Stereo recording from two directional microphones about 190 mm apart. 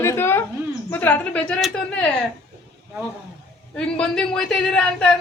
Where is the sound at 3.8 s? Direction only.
5° left (ahead or behind).